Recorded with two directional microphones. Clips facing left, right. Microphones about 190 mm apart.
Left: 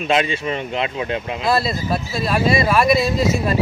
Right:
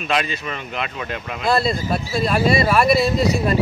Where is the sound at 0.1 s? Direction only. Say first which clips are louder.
Left 4 dB; 25° left (ahead or behind).